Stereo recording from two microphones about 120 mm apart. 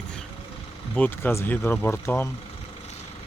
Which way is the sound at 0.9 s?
15° left (ahead or behind).